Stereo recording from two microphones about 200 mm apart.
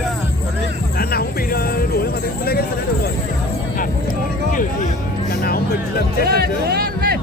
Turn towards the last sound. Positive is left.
turn(degrees=-50)  # may be behind; listen again after turning